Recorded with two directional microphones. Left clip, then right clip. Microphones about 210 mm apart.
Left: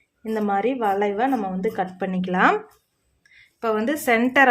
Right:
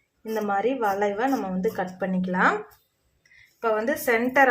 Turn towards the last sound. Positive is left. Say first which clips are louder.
# left 3 dB
turn(degrees=50)  # may be behind; listen again after turning